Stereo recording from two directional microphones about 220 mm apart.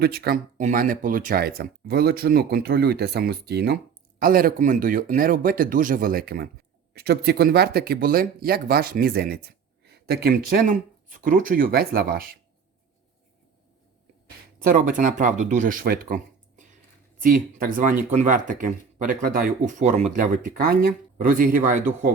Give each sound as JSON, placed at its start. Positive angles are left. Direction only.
{"t": 0.0, "sound": "speech", "side_deg": -45}
{"t": 14.6, "sound": "speech", "side_deg": -35}